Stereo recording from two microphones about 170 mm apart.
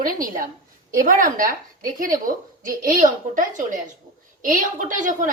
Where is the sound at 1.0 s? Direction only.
55° right (ahead or behind).